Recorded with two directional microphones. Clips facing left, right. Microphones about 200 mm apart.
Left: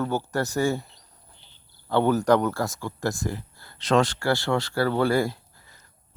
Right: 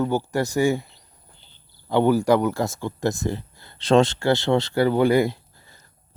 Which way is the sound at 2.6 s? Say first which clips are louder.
Right 4 dB; 20° right (ahead or behind).